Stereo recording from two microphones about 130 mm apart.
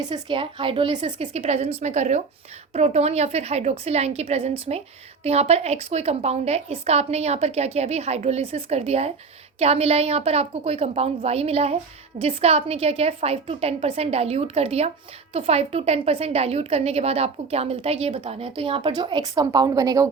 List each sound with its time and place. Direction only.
0.0 s a woman's voice: 35° right (ahead or behind)